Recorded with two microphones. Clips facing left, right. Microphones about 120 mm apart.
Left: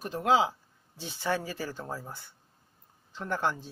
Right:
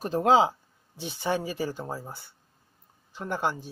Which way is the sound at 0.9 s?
15° right (ahead or behind).